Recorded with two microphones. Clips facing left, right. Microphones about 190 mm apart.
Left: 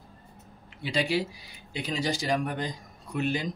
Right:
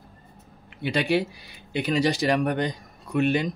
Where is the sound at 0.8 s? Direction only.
60° right (ahead or behind).